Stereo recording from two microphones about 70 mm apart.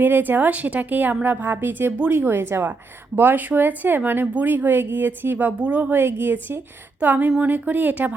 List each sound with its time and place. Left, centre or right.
0.0 s a woman's voice: right
5.9 s a woman's voice: right